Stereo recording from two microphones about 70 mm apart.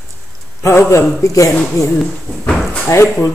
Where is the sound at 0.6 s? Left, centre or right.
Left.